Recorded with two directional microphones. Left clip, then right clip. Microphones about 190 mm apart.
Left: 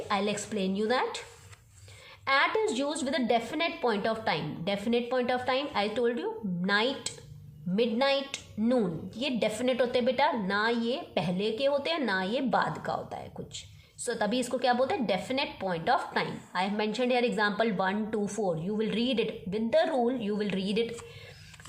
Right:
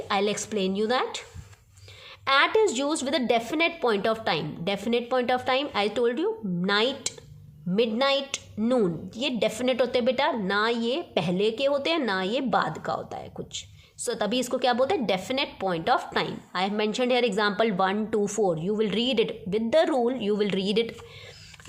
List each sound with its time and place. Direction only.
0.1 s a woman's voice: 25° right (ahead or behind)
2.2 s a woman's voice: 30° right (ahead or behind)